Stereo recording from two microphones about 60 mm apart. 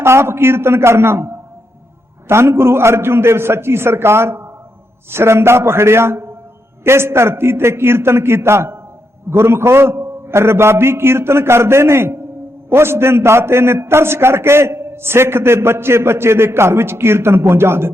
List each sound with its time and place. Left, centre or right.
0.0 s a man's voice: right